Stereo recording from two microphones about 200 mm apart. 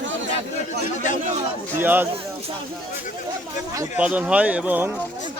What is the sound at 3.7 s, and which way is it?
Speech, 15° right (ahead or behind).